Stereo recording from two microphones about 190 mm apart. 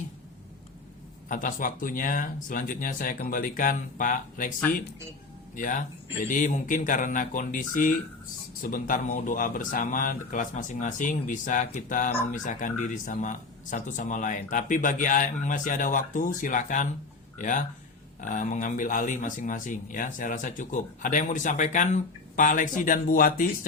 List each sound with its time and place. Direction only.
1.3 s speech: 45° left (ahead or behind)
5.5 s speech: 45° left (ahead or behind)